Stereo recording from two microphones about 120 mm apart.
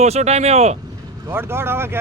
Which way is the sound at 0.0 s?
65° right (ahead or behind).